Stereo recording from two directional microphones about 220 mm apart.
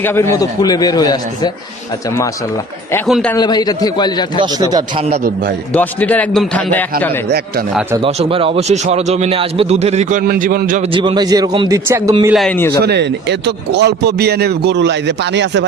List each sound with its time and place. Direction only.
0.0 s a man's voice: 10° left (ahead or behind)
3.1 s a man's voice: 5° left (ahead or behind)
3.3 s a man's voice: 20° left (ahead or behind)
4.4 s a man's voice: 20° right (ahead or behind)
5.7 s a man's voice: 5° left (ahead or behind)
7.3 s a man's voice: 45° right (ahead or behind)
7.7 s a man's voice: 5° right (ahead or behind)
7.9 s a man's voice: 25° right (ahead or behind); by 10.8 s 40° right (ahead or behind)
10.9 s a man's voice: 20° right (ahead or behind)
12.3 s a man's voice: 5° left (ahead or behind)
12.8 s a man's voice: 50° right (ahead or behind)